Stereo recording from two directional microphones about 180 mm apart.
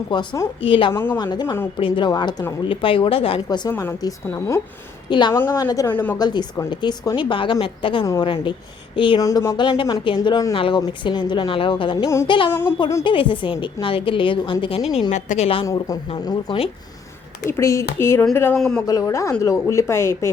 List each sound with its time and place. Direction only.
0.1 s speech: 25° left (ahead or behind)
0.9 s a woman's voice: 10° left (ahead or behind)
1.2 s speech: 25° left (ahead or behind)
3.7 s a woman's voice: 15° left (ahead or behind)
5.3 s a woman's voice: 15° left (ahead or behind)
6.1 s speech: 25° left (ahead or behind)
12.5 s a woman's voice: 15° left (ahead or behind)
13.1 s speech: 30° left (ahead or behind)
15.1 s a woman's voice: 40° left (ahead or behind)
15.6 s speech: 20° left (ahead or behind)
17.6 s a woman's voice: 15° left (ahead or behind)
18.5 s speech: 5° left (ahead or behind)
18.9 s a woman's voice: 20° left (ahead or behind)